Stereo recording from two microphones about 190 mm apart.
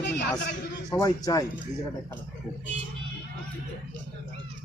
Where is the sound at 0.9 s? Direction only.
20° left (ahead or behind).